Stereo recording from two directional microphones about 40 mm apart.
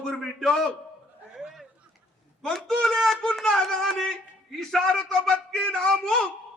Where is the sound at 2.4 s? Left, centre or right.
Centre.